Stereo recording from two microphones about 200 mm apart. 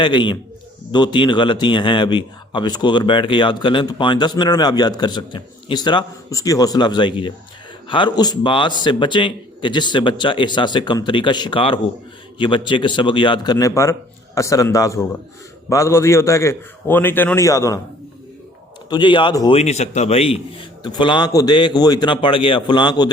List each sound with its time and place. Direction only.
0.0 s a man's voice: 25° left (ahead or behind)
18.9 s speech: 25° left (ahead or behind)
19.5 s a man's voice: 35° left (ahead or behind)